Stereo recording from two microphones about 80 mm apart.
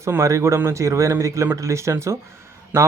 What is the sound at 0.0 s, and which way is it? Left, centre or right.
Speech, right.